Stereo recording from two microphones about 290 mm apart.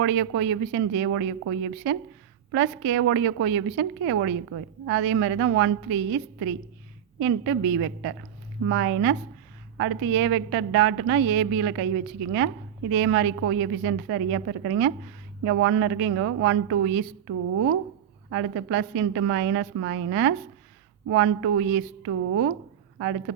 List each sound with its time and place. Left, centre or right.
0.0 s a woman's voice: right